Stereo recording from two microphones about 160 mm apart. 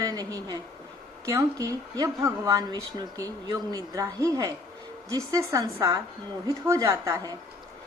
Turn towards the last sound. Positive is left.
turn(degrees=-20)  # may be behind; listen again after turning